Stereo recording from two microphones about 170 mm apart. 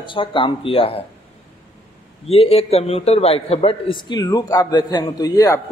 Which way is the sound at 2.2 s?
35° left (ahead or behind).